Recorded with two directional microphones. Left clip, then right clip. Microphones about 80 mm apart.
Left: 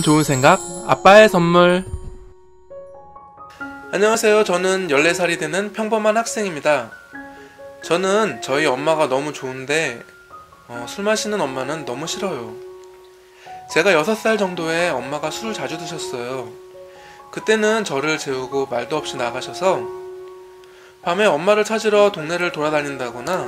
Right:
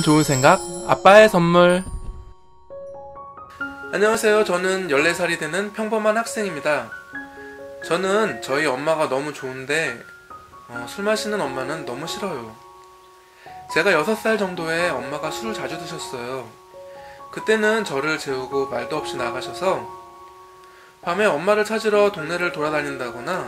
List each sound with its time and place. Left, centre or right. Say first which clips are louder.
0.0 s speech: left 1 dB; centre
3.9 s speech: left 2 dB; left
13.7 s speech: left 3 dB; left
21.0 s speech: left 3 dB; left